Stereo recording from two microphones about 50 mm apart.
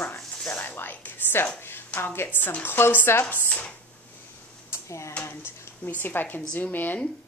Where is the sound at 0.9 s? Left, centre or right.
Left.